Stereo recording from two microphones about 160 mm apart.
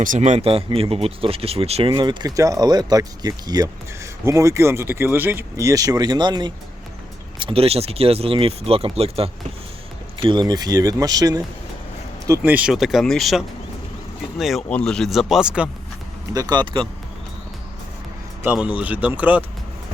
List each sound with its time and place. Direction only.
0.0 s speech: 50° right (ahead or behind); by 11.4 s 25° right (ahead or behind)
12.4 s speech: 5° right (ahead or behind)
16.3 s speech: 25° right (ahead or behind)
18.4 s speech: 10° right (ahead or behind)